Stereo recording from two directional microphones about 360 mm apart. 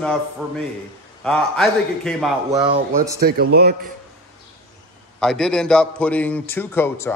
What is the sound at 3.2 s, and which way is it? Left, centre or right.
Speech, right.